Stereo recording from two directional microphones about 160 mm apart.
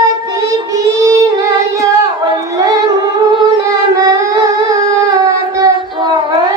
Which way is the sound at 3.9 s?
25° right (ahead or behind).